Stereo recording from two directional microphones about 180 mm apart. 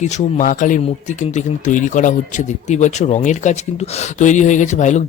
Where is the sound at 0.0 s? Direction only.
45° left (ahead or behind).